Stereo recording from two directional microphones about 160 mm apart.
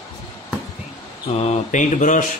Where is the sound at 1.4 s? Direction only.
45° left (ahead or behind).